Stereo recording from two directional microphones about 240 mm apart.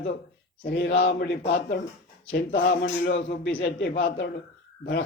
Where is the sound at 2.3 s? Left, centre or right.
Left.